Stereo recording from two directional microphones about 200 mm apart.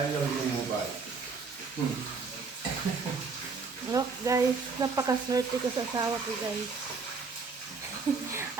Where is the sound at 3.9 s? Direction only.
15° right (ahead or behind).